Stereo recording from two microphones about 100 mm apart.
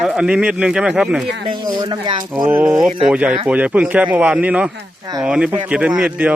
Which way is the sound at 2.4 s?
15° right (ahead or behind).